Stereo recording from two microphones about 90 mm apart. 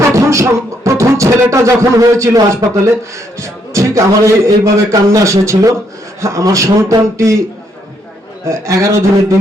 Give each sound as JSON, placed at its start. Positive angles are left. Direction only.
{"t": 0.1, "sound": "a man's voice", "side_deg": -35}
{"t": 8.4, "sound": "a man's voice", "side_deg": -35}